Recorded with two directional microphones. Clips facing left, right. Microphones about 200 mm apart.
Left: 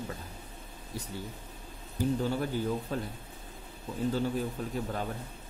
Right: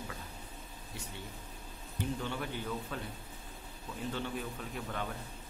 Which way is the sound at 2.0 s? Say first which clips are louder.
Left 8 dB; 40° left (ahead or behind).